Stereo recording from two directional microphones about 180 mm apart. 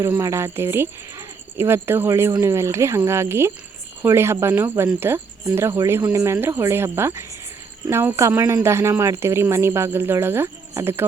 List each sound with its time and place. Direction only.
0.0 s speech: 15° right (ahead or behind)